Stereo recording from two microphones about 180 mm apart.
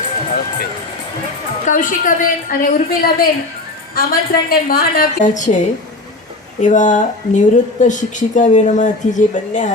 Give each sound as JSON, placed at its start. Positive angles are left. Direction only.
{"t": 1.6, "sound": "speech", "side_deg": 45}